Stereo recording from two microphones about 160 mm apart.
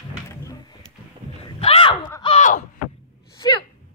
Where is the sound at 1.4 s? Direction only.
35° left (ahead or behind).